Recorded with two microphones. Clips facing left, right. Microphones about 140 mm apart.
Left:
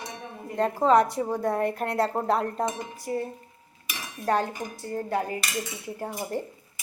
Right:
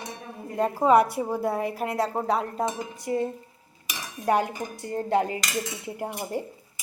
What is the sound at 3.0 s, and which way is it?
Speech, 20° right (ahead or behind).